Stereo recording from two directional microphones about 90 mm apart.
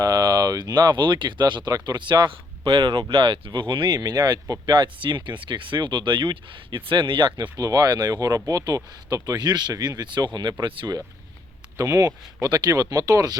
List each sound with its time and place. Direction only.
0.0 s speech: 45° right (ahead or behind)
4.6 s speech: 55° right (ahead or behind)
7.5 s speech: 40° right (ahead or behind); by 10.8 s 60° right (ahead or behind)
11.8 s speech: 40° right (ahead or behind)